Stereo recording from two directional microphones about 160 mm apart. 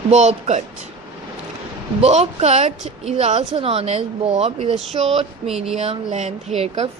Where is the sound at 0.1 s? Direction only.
45° right (ahead or behind).